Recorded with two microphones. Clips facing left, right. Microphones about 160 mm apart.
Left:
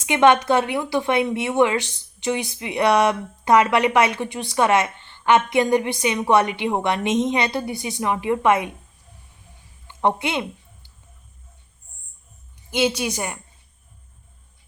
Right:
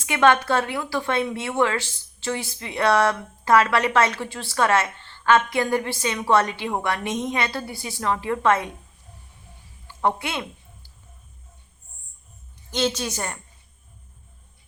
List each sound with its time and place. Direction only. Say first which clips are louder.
0.0 s speech: left 3 dB; 20° left (ahead or behind)
9.8 s a sound: left 3 dB; 20° left (ahead or behind)
12.7 s speech: left 3 dB; 10° left (ahead or behind)